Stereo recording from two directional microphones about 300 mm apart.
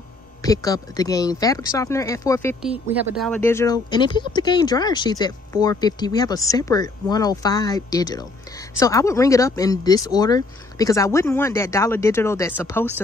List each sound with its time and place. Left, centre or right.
0.4 s speech: centre
2.6 s speech: centre